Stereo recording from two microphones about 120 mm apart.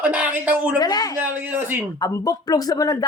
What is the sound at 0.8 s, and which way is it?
Speech, 35° left (ahead or behind).